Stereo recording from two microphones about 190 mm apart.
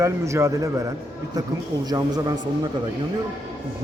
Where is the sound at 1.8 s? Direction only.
20° right (ahead or behind).